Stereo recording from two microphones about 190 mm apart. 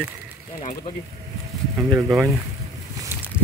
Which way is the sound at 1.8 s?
15° right (ahead or behind).